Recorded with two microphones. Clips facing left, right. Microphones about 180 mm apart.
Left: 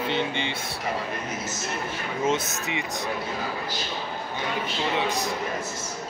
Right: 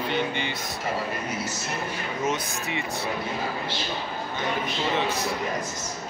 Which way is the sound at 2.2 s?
20° left (ahead or behind).